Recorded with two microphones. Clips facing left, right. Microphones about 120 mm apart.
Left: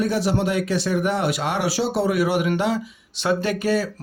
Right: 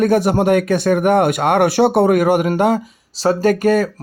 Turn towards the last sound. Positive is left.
turn(degrees=-50)  # may be behind; listen again after turning